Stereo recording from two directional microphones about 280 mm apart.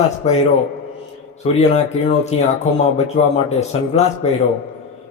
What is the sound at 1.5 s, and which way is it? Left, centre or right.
Speech, left.